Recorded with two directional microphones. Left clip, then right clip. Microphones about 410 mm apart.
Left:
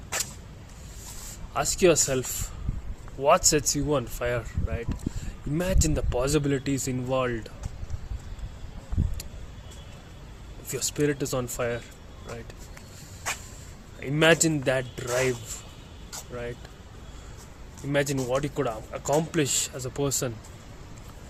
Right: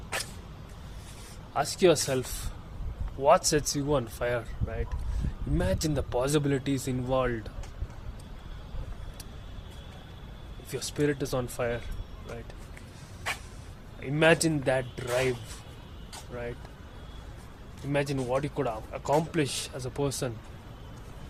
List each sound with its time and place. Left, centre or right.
1.5 s speech: centre
10.7 s speech: centre
14.0 s speech: centre
17.9 s speech: centre